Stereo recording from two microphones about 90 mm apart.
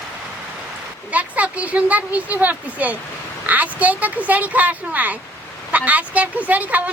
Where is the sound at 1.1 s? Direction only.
15° right (ahead or behind).